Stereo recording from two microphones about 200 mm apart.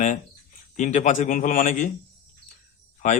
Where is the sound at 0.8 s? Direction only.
40° left (ahead or behind).